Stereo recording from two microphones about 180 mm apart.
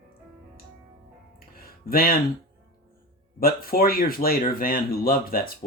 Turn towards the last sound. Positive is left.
turn(degrees=55)  # may be behind; listen again after turning